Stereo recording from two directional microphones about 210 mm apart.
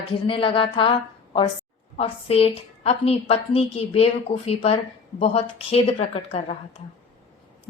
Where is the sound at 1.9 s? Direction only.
30° left (ahead or behind).